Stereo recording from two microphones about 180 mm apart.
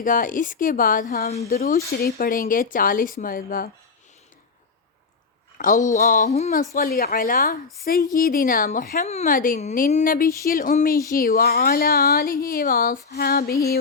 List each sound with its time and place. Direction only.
0.0 s a woman's voice: 50° left (ahead or behind)
1.5 s a woman's voice: 55° left (ahead or behind)
5.5 s a woman's voice: 45° left (ahead or behind)
6.7 s a woman's voice: 55° left (ahead or behind)